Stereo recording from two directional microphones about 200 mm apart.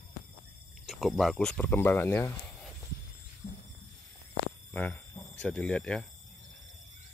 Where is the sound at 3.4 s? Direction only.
30° left (ahead or behind).